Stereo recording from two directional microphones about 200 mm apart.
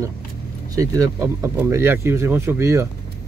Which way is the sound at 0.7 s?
15° right (ahead or behind).